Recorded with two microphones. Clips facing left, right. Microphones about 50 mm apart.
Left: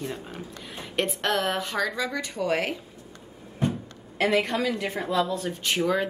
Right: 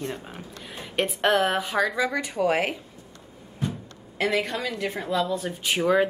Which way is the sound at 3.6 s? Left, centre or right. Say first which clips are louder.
Left 4 dB; left.